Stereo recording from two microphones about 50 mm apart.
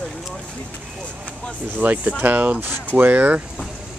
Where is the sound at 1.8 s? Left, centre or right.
Right.